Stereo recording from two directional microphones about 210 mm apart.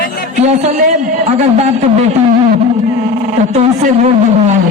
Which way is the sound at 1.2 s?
30° right (ahead or behind).